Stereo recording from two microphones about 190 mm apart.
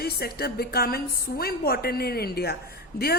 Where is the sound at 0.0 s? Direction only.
55° left (ahead or behind).